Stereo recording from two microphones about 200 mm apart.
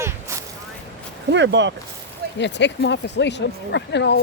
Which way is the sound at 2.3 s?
60° left (ahead or behind).